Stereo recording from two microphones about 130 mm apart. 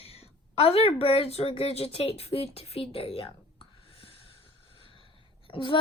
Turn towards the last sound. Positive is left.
turn(degrees=40)  # may be behind; listen again after turning